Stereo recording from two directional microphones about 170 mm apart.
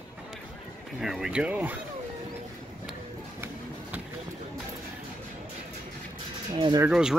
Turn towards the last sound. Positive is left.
turn(degrees=-5)  # may be behind; listen again after turning